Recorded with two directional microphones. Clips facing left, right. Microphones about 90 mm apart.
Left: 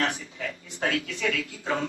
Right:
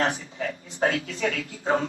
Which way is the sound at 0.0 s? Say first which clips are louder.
Right 3 dB; 35° right (ahead or behind).